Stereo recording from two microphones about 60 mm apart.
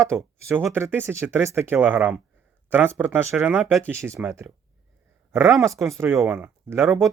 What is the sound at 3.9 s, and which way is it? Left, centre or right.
Speech, right.